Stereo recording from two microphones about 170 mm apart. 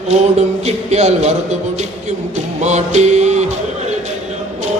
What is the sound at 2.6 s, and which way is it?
Music, 45° right (ahead or behind).